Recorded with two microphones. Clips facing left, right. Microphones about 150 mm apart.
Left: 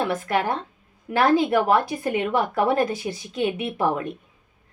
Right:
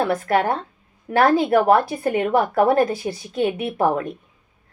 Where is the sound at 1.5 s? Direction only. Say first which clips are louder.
Right 4 dB; 45° right (ahead or behind).